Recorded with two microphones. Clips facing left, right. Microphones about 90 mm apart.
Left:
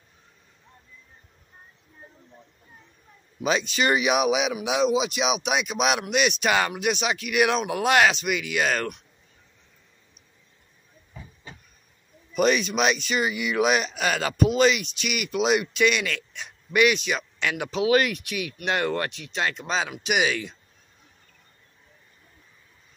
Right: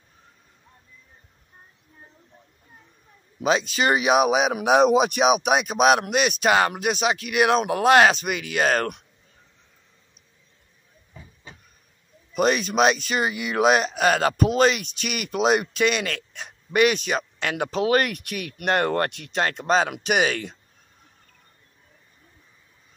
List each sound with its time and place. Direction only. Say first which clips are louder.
3.7 s speech: right 2 dB; 30° right (ahead or behind)
4.6 s speech: right 6 dB; 55° right (ahead or behind)
12.4 s speech: right 2 dB; 35° right (ahead or behind); by 20.5 s 50° right (ahead or behind)